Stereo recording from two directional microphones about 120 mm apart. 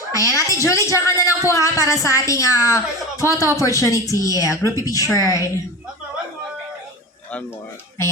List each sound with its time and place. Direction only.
0.1 s a woman's voice: 25° left (ahead or behind)